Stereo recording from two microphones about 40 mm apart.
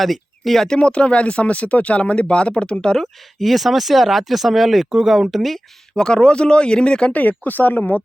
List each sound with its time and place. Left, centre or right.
0.0 s speech: centre
0.7 s speech: left
3.0 s speech: centre
6.0 s speech: left
7.1 s speech: left